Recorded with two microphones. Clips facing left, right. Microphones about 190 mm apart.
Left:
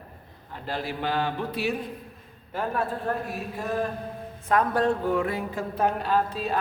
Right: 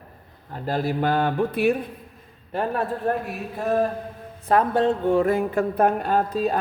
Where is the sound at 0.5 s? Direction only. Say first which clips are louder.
Right 7 dB; 40° right (ahead or behind).